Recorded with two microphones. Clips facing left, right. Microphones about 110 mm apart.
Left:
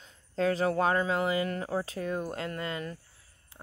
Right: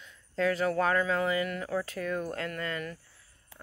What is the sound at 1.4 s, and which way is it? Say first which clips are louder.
Speech: left 1 dB; 35° left (ahead or behind).